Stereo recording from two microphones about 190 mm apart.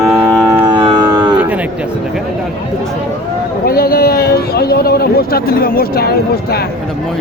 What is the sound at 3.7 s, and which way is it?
A man's voice, 50° left (ahead or behind).